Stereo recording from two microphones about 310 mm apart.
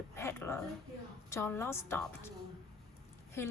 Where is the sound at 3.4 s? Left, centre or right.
Centre.